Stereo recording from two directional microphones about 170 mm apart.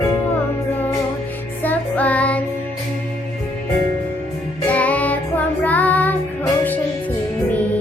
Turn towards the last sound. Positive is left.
turn(degrees=10)  # may be behind; listen again after turning